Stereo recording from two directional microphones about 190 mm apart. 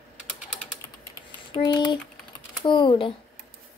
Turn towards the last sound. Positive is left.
turn(degrees=25)  # may be behind; listen again after turning